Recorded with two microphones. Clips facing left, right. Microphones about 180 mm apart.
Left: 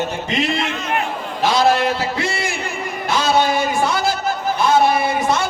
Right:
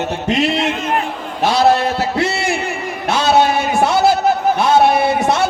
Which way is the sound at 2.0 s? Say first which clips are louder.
Right 4 dB; 70° right (ahead or behind).